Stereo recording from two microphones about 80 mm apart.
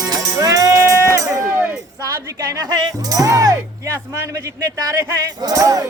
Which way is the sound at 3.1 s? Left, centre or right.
Right.